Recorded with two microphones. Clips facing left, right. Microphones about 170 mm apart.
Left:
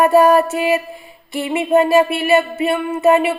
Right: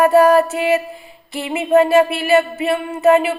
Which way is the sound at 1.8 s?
30° right (ahead or behind).